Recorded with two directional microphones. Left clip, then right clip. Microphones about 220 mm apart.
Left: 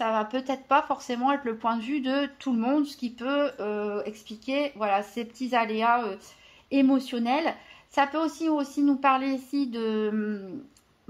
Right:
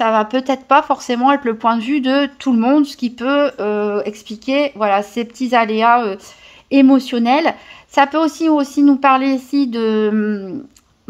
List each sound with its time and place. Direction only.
0.0 s speech: 45° right (ahead or behind)